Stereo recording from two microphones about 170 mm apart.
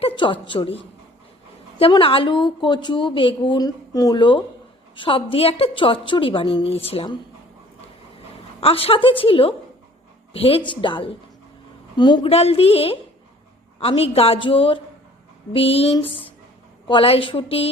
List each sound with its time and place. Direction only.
0.0 s a woman's voice: 30° left (ahead or behind)
8.6 s a woman's voice: 35° left (ahead or behind)